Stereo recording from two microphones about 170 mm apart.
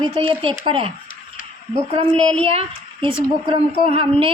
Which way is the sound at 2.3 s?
35° right (ahead or behind).